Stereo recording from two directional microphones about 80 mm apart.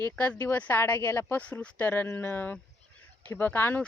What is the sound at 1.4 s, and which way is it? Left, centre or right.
Speech, centre.